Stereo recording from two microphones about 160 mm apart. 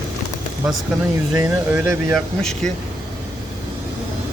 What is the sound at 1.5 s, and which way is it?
Speech, 15° right (ahead or behind).